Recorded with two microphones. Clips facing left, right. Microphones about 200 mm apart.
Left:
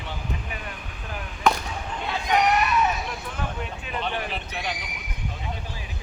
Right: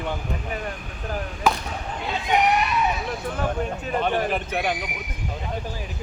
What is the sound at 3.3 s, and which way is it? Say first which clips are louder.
Horse: right 7 dB; 45° right (ahead or behind).